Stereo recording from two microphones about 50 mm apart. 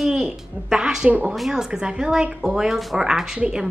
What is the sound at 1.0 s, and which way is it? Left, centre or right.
Speech, right.